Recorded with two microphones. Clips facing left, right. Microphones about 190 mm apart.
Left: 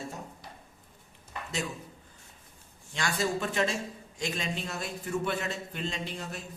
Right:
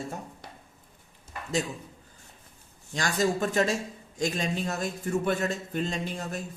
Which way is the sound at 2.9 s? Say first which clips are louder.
Right 4 dB; 40° right (ahead or behind).